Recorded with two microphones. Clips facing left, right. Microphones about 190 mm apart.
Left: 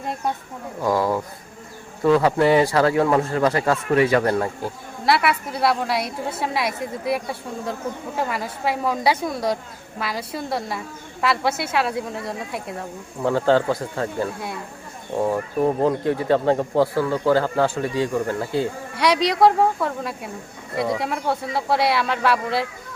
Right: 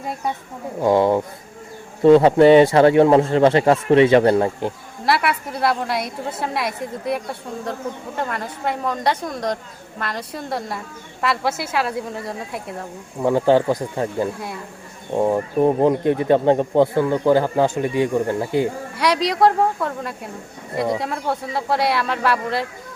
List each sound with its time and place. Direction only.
0.0 s a woman's voice: centre (ahead or behind)
0.8 s speech: 25° right (ahead or behind)
5.0 s a woman's voice: centre (ahead or behind)
13.2 s speech: 15° right (ahead or behind)
18.9 s a woman's voice: centre (ahead or behind)